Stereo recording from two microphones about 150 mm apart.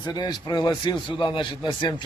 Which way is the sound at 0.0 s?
25° left (ahead or behind).